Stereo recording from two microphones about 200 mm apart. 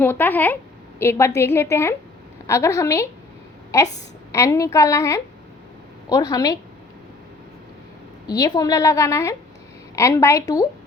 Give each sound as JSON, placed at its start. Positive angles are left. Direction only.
{"t": 0.0, "sound": "a woman's voice", "side_deg": 10}
{"t": 8.3, "sound": "a woman's voice", "side_deg": 20}